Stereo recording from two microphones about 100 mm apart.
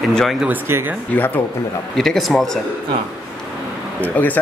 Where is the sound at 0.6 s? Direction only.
25° right (ahead or behind).